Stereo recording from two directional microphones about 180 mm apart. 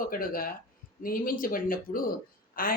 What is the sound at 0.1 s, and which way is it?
A woman's voice, 50° left (ahead or behind).